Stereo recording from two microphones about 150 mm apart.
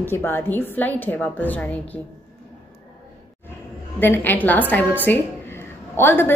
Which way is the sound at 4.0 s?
15° left (ahead or behind).